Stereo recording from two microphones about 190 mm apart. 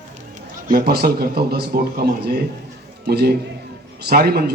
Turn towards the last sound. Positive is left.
turn(degrees=-55)  # may be behind; listen again after turning